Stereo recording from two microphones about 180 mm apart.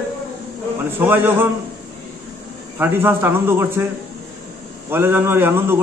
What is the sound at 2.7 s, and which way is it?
A man's voice, 10° right (ahead or behind).